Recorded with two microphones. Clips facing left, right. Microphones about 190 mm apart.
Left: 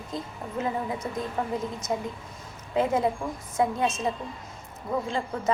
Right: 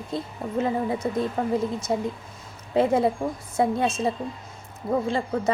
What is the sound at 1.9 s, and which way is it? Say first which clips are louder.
A woman's voice: right 4 dB; 30° right (ahead or behind).